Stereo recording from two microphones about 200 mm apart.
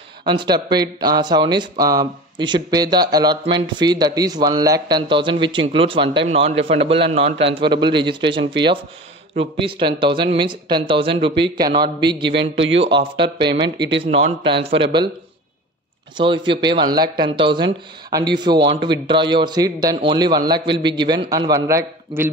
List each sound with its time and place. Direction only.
0.2 s speech: 20° right (ahead or behind)
12.3 s a man's voice: 65° right (ahead or behind)
12.8 s speech: 25° right (ahead or behind)
16.2 s speech: 25° right (ahead or behind)